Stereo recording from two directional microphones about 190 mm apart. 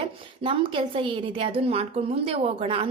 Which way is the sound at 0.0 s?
25° right (ahead or behind).